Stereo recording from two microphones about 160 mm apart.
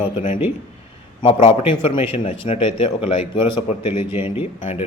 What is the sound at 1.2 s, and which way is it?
A man's voice, 35° left (ahead or behind).